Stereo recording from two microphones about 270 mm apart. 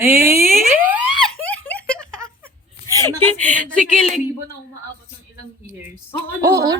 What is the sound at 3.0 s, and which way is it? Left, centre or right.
Speech, centre.